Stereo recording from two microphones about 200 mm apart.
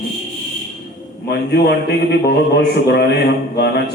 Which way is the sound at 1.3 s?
55° left (ahead or behind).